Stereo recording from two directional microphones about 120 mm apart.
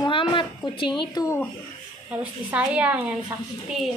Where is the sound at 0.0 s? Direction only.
45° left (ahead or behind).